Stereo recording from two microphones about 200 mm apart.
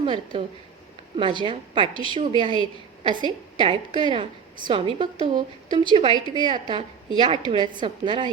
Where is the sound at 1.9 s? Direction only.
25° left (ahead or behind).